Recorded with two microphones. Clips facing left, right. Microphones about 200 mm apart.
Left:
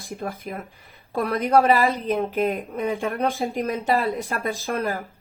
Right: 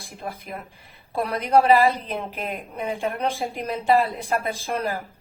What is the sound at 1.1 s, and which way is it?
Speech, 45° left (ahead or behind).